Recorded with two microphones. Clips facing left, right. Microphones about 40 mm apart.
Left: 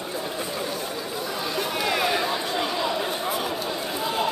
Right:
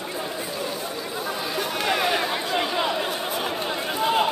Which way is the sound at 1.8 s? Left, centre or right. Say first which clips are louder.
Right 1 dB; centre.